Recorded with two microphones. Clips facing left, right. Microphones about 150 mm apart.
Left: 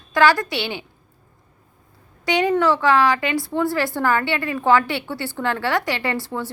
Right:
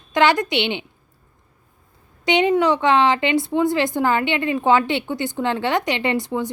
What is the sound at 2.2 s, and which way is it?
Speech, 20° right (ahead or behind).